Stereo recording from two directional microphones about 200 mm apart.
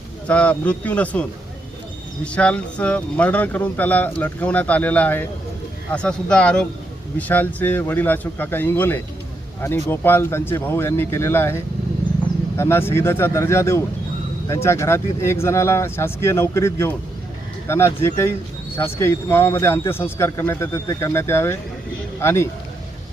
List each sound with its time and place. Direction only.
0.3 s speech: 5° left (ahead or behind)
2.2 s speech: 5° left (ahead or behind)